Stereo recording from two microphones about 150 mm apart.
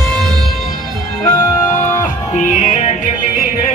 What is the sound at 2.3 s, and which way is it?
Music, 55° left (ahead or behind).